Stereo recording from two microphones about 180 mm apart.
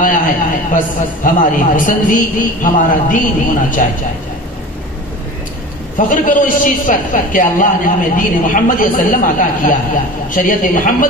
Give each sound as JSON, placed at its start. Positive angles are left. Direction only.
{"t": 0.0, "sound": "a man's voice", "side_deg": 45}
{"t": 5.9, "sound": "a man's voice", "side_deg": 45}